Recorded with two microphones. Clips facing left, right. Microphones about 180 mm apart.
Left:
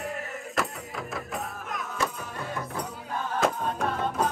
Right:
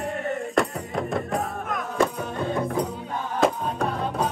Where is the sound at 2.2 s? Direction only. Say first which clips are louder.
Right 8 dB; 25° right (ahead or behind).